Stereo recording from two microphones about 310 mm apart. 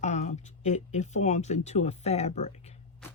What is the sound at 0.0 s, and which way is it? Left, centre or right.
Speech, left.